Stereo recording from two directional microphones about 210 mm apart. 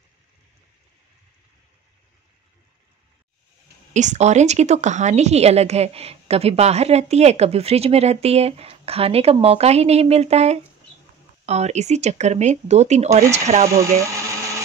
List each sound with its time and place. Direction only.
3.9 s a woman's voice: 35° right (ahead or behind)